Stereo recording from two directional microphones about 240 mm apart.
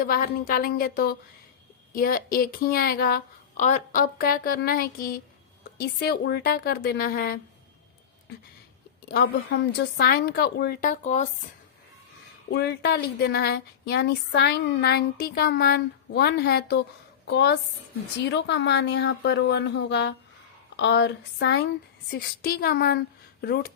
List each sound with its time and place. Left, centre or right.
0.0 s speech: left
9.0 s speech: left
12.5 s speech: left